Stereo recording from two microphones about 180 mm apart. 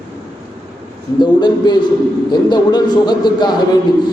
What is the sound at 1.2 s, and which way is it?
A man's voice, 25° left (ahead or behind).